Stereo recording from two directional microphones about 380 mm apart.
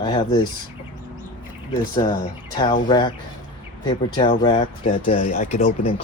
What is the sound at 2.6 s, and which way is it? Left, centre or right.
Speech, centre.